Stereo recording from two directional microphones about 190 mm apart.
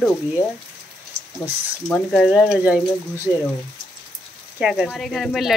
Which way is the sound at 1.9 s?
Centre (ahead or behind).